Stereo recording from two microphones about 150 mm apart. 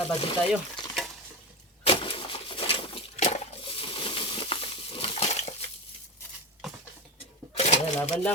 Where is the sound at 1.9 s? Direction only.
35° left (ahead or behind).